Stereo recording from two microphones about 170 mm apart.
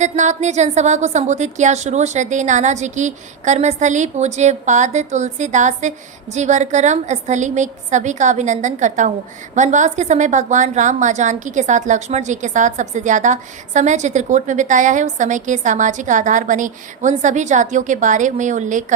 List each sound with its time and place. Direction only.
0.0 s a woman's voice: 45° right (ahead or behind)